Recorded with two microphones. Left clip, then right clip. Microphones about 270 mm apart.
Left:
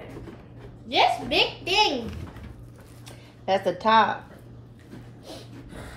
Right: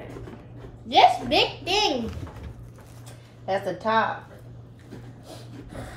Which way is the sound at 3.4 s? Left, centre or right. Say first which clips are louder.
Left 3 dB; left.